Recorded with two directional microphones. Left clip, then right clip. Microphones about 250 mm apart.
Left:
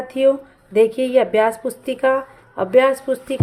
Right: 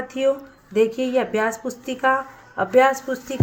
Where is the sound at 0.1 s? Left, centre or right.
Left.